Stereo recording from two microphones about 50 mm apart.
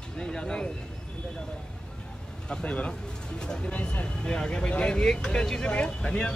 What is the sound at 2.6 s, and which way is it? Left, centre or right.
Speech, left.